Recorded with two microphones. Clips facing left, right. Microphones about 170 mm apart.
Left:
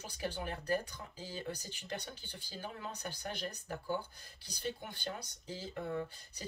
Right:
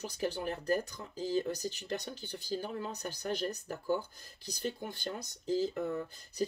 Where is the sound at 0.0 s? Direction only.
40° right (ahead or behind).